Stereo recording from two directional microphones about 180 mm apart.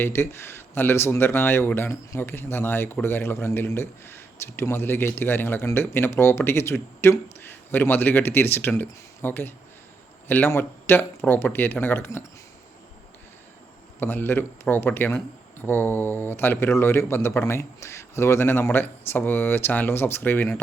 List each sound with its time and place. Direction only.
0.0 s speech: 15° left (ahead or behind)
14.0 s speech: 10° left (ahead or behind)